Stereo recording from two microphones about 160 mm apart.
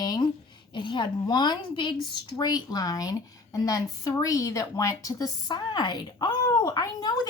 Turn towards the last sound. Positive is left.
turn(degrees=25)  # may be behind; listen again after turning